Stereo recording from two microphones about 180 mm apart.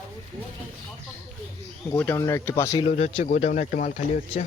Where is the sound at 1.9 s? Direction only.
10° left (ahead or behind).